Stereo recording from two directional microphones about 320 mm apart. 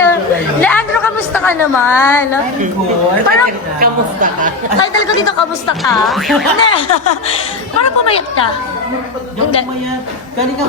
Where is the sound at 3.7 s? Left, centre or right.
Right.